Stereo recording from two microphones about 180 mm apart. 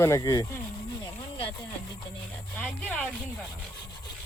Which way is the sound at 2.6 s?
10° left (ahead or behind).